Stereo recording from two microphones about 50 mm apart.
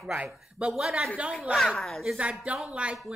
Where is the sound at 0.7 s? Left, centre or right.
Centre.